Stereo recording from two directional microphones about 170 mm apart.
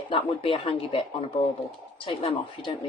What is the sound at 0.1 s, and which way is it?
Speech, 30° left (ahead or behind).